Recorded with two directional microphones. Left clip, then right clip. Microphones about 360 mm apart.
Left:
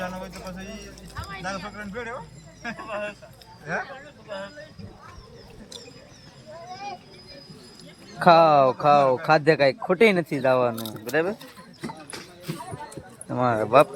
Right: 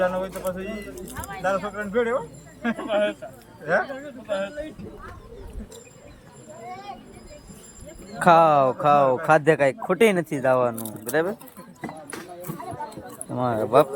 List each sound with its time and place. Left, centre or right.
0.0 s speech: right
4.3 s speech: right
8.2 s speech: centre
13.3 s speech: centre